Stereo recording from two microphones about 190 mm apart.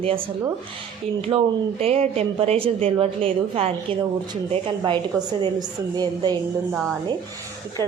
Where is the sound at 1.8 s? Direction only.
30° right (ahead or behind).